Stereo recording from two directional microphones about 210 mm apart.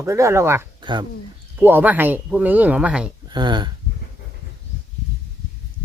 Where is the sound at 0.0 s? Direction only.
15° right (ahead or behind).